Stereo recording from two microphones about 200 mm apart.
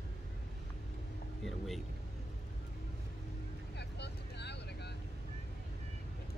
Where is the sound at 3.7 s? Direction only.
60° left (ahead or behind).